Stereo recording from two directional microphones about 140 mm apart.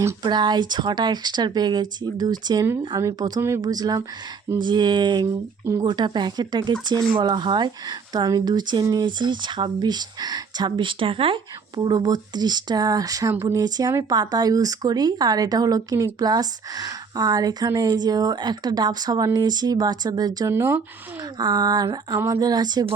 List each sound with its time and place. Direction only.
0.0 s speech: 30° right (ahead or behind)
11.8 s speech: 30° right (ahead or behind)
20.5 s speech: 15° right (ahead or behind)
21.3 s speech: 30° right (ahead or behind)